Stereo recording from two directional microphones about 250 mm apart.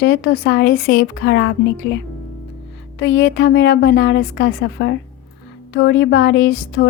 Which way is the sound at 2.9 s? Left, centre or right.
Left.